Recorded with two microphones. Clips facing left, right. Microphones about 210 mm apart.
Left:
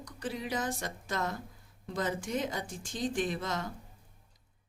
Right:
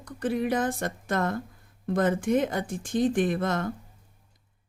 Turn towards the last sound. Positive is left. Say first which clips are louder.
# right 8 dB
turn(degrees=-55)  # may be behind; listen again after turning